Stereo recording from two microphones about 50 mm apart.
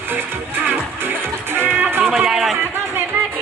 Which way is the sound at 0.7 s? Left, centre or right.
Right.